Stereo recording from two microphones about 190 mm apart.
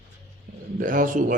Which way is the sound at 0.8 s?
45° right (ahead or behind).